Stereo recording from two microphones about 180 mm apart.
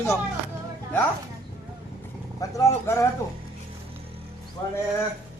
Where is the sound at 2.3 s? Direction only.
15° left (ahead or behind).